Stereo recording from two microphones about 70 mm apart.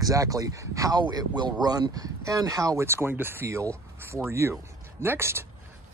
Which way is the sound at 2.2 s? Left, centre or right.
Right.